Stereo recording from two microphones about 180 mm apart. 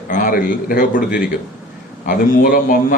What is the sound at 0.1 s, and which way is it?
A man's voice, 50° left (ahead or behind).